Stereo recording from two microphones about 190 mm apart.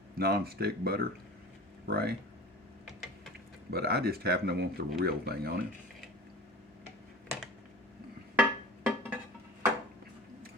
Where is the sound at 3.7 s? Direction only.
55° right (ahead or behind).